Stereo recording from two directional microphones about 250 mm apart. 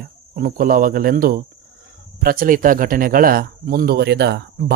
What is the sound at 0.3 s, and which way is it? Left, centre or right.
Speech, right.